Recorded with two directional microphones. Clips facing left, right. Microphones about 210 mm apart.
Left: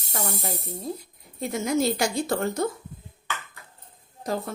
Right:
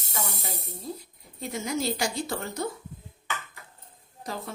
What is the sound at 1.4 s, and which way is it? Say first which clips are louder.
A woman's voice: left 6 dB; 50° left (ahead or behind).